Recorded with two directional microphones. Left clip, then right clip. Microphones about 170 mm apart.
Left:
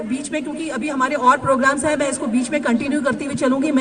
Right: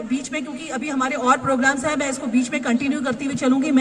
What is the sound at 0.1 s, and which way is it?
A man's voice, 25° left (ahead or behind).